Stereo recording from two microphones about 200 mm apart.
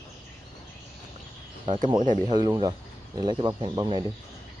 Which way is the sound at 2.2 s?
20° right (ahead or behind).